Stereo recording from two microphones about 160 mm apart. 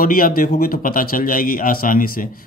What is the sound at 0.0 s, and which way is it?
Speech, 60° left (ahead or behind).